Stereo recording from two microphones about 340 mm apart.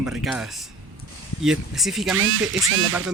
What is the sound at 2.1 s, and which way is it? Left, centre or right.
Speech, right.